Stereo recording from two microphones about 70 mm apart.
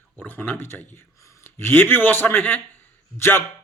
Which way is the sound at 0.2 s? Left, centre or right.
Left.